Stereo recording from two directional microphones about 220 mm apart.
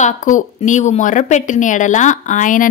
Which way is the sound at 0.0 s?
35° left (ahead or behind).